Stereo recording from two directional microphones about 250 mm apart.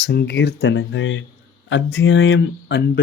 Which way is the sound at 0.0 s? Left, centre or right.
Left.